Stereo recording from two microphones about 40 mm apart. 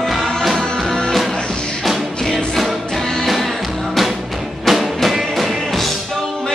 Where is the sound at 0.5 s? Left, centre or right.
Centre.